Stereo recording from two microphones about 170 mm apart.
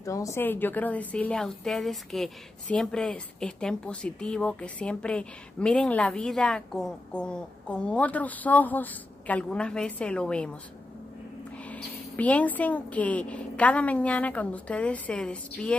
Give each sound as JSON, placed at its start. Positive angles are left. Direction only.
{"t": 0.0, "sound": "a woman's voice", "side_deg": 20}
{"t": 11.7, "sound": "speech", "side_deg": 10}